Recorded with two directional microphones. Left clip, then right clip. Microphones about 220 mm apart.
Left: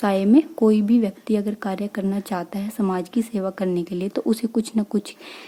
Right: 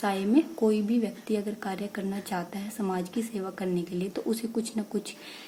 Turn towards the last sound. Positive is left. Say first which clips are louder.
# left 7 dB
turn(degrees=45)  # may be behind; listen again after turning